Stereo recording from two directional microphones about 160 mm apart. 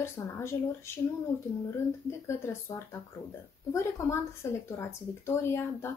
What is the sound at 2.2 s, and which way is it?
Speech, 15° left (ahead or behind).